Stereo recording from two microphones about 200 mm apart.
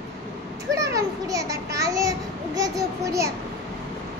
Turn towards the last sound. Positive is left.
turn(degrees=-15)  # may be behind; listen again after turning